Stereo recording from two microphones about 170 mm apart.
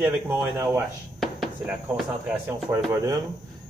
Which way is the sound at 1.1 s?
Centre (ahead or behind).